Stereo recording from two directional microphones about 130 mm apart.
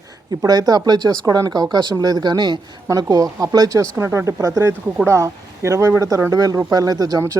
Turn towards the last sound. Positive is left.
turn(degrees=-30)  # may be behind; listen again after turning